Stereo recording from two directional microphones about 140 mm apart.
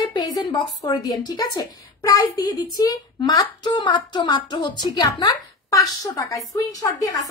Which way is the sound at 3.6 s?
30° left (ahead or behind).